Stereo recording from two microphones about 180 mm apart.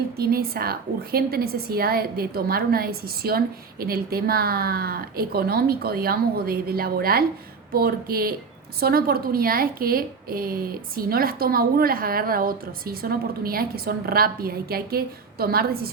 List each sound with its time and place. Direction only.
0.2 s a woman's voice: 55° right (ahead or behind)